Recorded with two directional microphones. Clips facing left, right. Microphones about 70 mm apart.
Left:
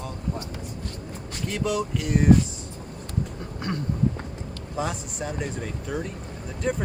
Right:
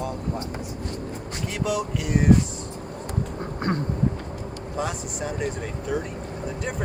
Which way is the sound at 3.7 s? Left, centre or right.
Right.